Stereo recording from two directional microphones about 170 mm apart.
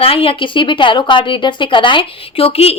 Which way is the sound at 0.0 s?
35° left (ahead or behind).